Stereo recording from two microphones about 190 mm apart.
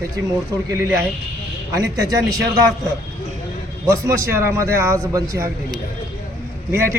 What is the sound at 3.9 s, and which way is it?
A man's voice, 15° right (ahead or behind).